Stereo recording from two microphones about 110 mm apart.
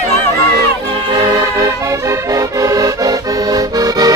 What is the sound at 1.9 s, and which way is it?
Accordion, 30° right (ahead or behind).